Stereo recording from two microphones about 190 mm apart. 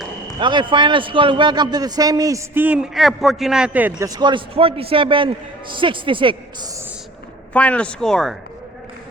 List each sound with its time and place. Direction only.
0.3 s a man's voice: 25° right (ahead or behind); by 4.1 s 10° right (ahead or behind)
4.1 s a man's voice: 25° right (ahead or behind)
7.5 s speech: 5° left (ahead or behind)